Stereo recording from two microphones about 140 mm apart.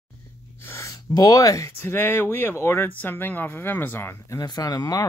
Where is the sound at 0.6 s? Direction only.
20° left (ahead or behind).